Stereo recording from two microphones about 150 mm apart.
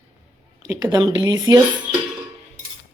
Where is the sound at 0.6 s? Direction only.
25° right (ahead or behind).